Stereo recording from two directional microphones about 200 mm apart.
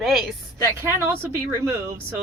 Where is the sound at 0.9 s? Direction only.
15° right (ahead or behind).